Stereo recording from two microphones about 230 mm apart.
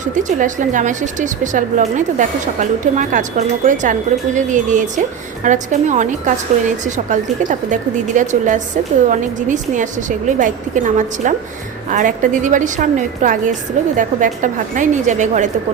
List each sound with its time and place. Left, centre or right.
0.0 s a woman's voice: right